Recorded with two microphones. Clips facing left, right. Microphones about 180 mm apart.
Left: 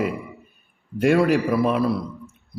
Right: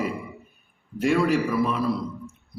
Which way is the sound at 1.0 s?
65° left (ahead or behind).